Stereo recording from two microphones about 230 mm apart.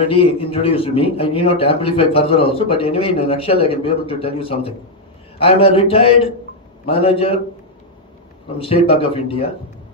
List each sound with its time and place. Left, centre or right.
0.1 s a man's voice: left
8.5 s a man's voice: left